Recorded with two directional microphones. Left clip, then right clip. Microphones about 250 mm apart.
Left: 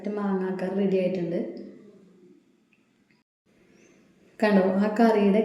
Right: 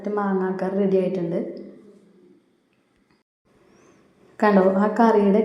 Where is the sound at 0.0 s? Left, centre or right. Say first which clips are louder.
Right 6 dB; centre.